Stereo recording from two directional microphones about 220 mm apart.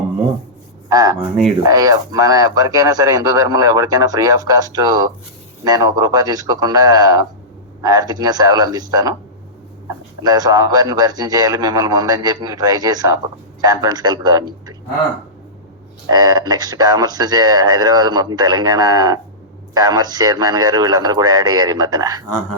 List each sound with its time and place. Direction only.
0.9 s speech: 15° right (ahead or behind)
10.2 s speech: 15° right (ahead or behind)
16.0 s speech: 15° right (ahead or behind)